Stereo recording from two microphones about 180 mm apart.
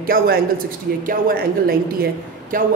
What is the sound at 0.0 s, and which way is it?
A woman's voice, 55° right (ahead or behind).